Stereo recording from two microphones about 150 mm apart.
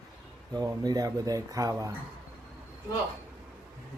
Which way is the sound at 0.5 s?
25° right (ahead or behind).